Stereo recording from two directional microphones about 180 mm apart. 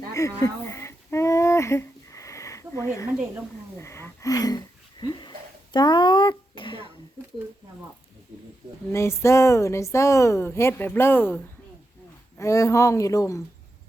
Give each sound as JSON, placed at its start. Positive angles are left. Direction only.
{"t": 0.1, "sound": "a sound", "side_deg": 15}
{"t": 5.7, "sound": "a child's voice", "side_deg": 25}
{"t": 8.9, "sound": "speech", "side_deg": 15}
{"t": 12.4, "sound": "speech", "side_deg": 15}